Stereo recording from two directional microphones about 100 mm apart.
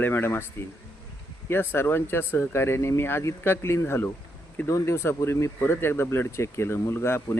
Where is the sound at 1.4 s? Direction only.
20° left (ahead or behind).